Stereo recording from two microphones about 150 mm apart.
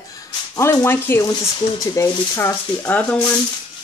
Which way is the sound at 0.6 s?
15° left (ahead or behind).